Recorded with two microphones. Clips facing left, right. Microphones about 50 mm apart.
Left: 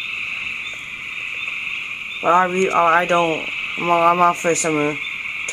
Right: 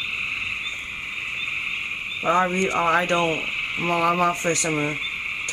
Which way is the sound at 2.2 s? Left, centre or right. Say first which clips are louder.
Left 5 dB; centre.